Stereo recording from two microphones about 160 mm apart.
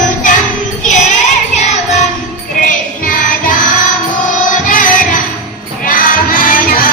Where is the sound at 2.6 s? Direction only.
55° left (ahead or behind).